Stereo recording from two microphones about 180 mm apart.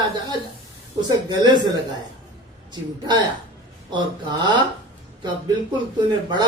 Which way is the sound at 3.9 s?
25° right (ahead or behind).